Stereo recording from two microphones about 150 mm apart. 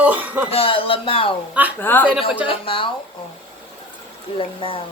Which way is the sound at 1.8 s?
15° left (ahead or behind).